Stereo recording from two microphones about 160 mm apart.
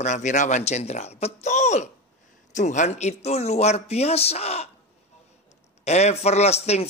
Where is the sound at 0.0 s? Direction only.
50° left (ahead or behind).